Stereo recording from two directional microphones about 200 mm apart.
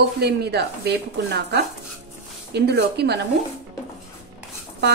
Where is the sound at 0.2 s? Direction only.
55° right (ahead or behind).